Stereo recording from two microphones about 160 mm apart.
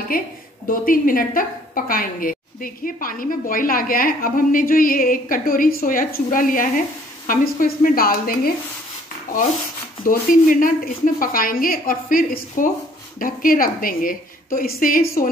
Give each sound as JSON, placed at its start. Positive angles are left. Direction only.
{"t": 0.1, "sound": "a woman's voice", "side_deg": 65}
{"t": 10.0, "sound": "a woman's voice", "side_deg": 60}